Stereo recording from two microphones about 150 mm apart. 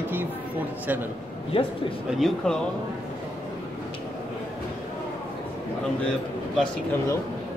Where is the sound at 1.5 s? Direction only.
35° left (ahead or behind).